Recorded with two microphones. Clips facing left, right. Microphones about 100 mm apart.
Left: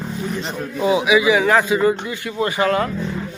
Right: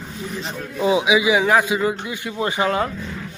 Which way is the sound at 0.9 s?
20° right (ahead or behind).